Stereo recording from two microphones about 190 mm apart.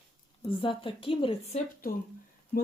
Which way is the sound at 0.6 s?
25° left (ahead or behind).